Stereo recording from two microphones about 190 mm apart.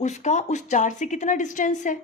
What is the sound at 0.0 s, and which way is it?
A woman's voice, 40° left (ahead or behind).